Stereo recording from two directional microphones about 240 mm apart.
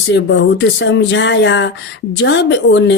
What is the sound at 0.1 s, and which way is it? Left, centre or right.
A woman's voice, left.